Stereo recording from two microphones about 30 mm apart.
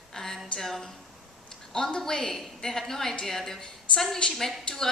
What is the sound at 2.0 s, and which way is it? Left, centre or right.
A woman's voice, centre.